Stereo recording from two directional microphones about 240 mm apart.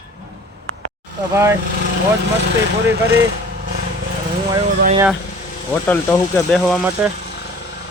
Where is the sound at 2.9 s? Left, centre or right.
Right.